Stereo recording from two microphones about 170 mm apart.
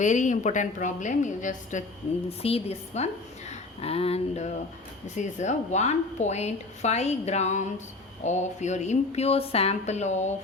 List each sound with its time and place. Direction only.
0.0 s a woman's voice: 45° left (ahead or behind)
2.4 s a woman's voice: 35° left (ahead or behind)
3.5 s a sound: 35° left (ahead or behind)
5.1 s a woman's voice: 45° left (ahead or behind)